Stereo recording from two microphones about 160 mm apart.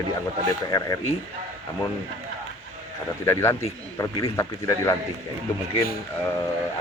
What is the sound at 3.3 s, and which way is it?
Speech, 15° left (ahead or behind).